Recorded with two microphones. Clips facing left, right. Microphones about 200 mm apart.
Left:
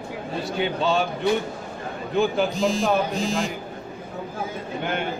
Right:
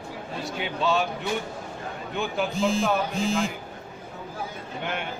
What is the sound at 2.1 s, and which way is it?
Speech, 35° left (ahead or behind).